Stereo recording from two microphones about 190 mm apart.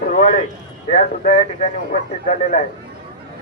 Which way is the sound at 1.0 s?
40° left (ahead or behind).